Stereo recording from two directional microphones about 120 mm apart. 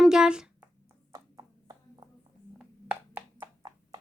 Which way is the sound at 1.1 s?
30° right (ahead or behind).